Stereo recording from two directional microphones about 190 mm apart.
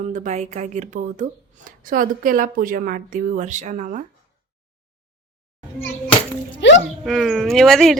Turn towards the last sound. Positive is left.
turn(degrees=0)  # may be behind; listen again after turning